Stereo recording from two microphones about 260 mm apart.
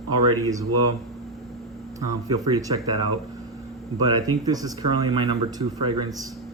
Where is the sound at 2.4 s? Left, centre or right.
Centre.